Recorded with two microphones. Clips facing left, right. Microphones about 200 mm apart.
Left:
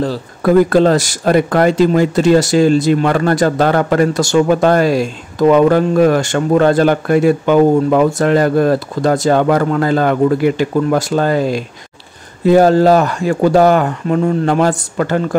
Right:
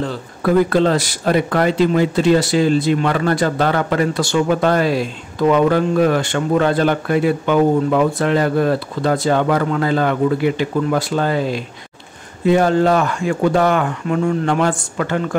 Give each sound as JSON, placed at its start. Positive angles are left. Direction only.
{"t": 0.0, "sound": "speech", "side_deg": 40}